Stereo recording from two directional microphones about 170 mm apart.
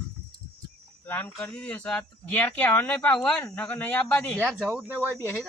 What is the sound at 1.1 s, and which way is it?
Speech, 10° left (ahead or behind).